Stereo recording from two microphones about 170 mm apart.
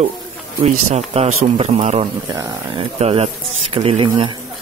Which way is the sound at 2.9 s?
40° right (ahead or behind).